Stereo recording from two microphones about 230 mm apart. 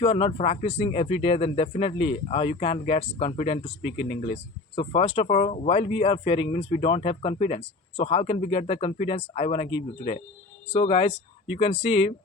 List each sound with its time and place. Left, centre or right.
0.0 s speech: left